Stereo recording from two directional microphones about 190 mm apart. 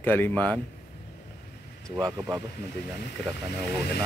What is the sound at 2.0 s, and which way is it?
Speech, 20° right (ahead or behind).